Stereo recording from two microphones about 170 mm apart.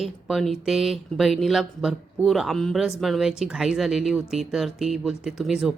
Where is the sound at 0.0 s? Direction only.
Centre (ahead or behind).